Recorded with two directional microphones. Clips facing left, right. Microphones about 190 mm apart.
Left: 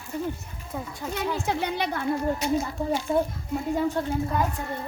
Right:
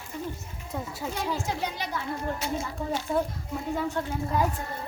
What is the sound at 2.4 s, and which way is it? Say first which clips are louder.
Speech: left 7 dB; 15° left (ahead or behind).